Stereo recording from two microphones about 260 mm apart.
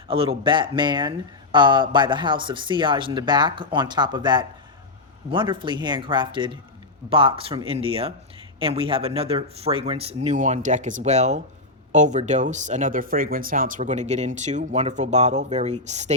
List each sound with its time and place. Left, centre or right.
0.1 s speech: right